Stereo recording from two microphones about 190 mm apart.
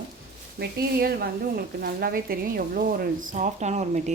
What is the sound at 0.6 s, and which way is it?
A woman's voice, 55° right (ahead or behind).